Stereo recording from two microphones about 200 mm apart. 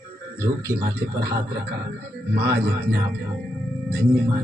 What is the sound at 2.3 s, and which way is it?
Speech, 55° right (ahead or behind).